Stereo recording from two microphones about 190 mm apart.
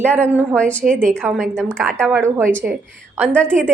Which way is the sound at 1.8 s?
10° right (ahead or behind).